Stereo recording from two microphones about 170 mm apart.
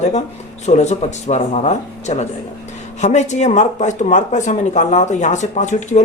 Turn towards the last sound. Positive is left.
turn(degrees=45)  # may be behind; listen again after turning